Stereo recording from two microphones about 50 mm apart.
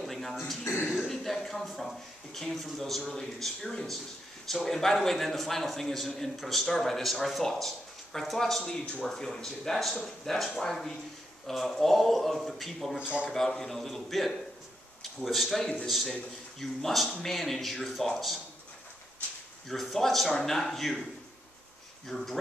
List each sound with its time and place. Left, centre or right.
0.0 s throat clearing: centre
0.9 s a sound: centre
3.1 s a man's voice: centre
8.6 s a man's voice: centre
12.9 s a man's voice: right
13.3 s a man's voice: centre
19.7 s a man's voice: centre
22.0 s a man's voice: centre